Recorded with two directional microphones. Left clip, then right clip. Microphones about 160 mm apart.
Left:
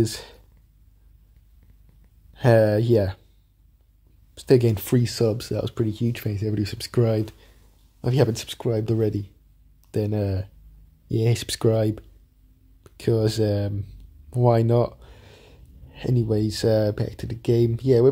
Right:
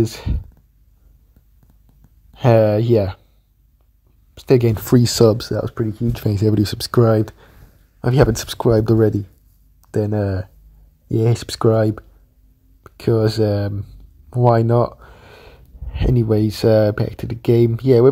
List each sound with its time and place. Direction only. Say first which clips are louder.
0.0 s speech: right 4 dB; 5° right (ahead or behind)
2.3 s speech: right 4 dB; 5° right (ahead or behind)
4.4 s speech: right 3 dB; 5° right (ahead or behind)
4.8 s speech: right 9 dB; 35° right (ahead or behind)
5.5 s speech: right 5 dB; 10° right (ahead or behind)
5.8 s speech: right 3 dB; centre (ahead or behind)
6.2 s speech: right 10 dB; 35° right (ahead or behind); by 8.3 s 15° right (ahead or behind)
8.3 s speech: right 9 dB; 30° right (ahead or behind); by 18.0 s 15° right (ahead or behind)